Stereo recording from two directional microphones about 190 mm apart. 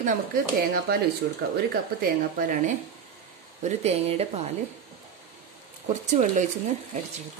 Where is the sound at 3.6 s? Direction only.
35° right (ahead or behind).